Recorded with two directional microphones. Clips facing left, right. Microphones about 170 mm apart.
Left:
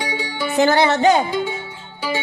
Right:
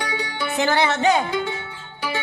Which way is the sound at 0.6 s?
40° left (ahead or behind).